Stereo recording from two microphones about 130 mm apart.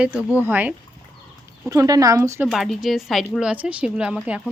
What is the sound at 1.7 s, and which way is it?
Speech, 25° right (ahead or behind).